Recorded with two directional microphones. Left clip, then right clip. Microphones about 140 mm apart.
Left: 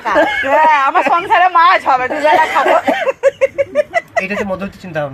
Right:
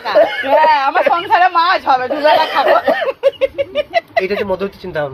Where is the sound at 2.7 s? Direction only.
40° right (ahead or behind).